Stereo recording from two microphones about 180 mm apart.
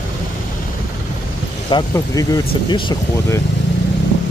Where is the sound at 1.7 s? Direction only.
25° left (ahead or behind).